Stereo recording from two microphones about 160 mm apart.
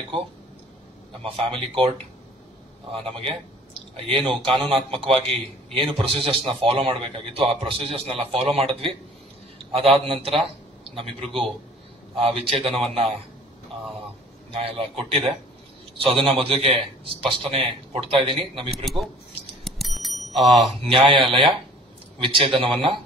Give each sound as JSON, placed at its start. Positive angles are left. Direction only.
{"t": 1.2, "sound": "a man's voice", "side_deg": -35}
{"t": 11.2, "sound": "a man's voice", "side_deg": 0}
{"t": 12.2, "sound": "a man's voice", "side_deg": -40}
{"t": 14.5, "sound": "a man's voice", "side_deg": -35}
{"t": 19.6, "sound": "bicycle bell", "side_deg": 0}
{"t": 20.5, "sound": "a man's voice", "side_deg": -35}